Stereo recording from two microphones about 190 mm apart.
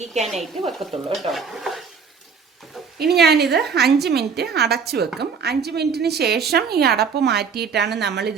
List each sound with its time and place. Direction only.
0.2 s speech: centre (ahead or behind)
1.3 s dishes: centre (ahead or behind)
3.0 s a woman's voice: 55° right (ahead or behind)